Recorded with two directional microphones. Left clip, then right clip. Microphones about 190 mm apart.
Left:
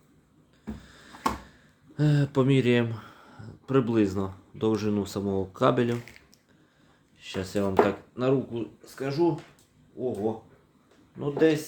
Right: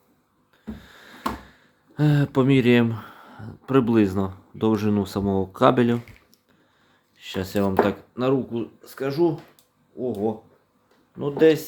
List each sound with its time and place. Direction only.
0.8 s a sound: 20° right (ahead or behind)
2.0 s speech: 15° right (ahead or behind)
7.2 s speech: 20° right (ahead or behind)